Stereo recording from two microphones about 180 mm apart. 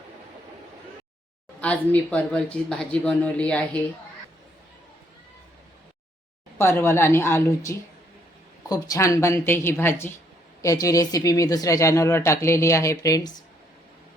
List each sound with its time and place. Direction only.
1.6 s speech: 10° left (ahead or behind)
6.6 s speech: 15° left (ahead or behind)